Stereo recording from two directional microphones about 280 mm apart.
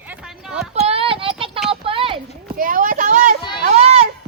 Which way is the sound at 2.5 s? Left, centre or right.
Right.